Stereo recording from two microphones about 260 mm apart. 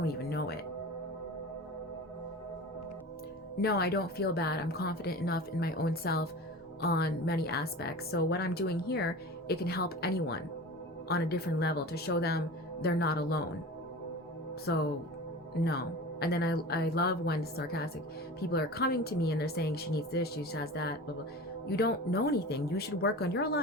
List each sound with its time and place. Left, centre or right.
0.0 s music: left
3.6 s speech: left
14.7 s speech: left
16.2 s speech: left